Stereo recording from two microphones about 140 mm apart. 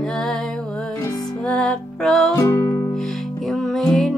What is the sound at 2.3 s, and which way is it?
Music, 20° left (ahead or behind).